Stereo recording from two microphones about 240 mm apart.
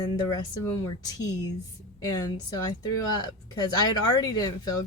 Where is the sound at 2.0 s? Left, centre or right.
Centre.